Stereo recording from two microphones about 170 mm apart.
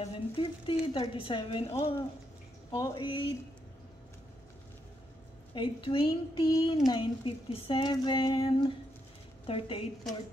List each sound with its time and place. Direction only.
0.0 s speech: 30° left (ahead or behind)
2.7 s speech: 25° left (ahead or behind)
5.5 s speech: 30° left (ahead or behind)